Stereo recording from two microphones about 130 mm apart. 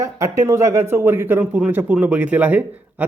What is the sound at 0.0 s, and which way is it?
Speech, 25° right (ahead or behind).